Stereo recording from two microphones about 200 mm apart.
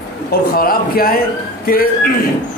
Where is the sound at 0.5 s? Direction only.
45° left (ahead or behind).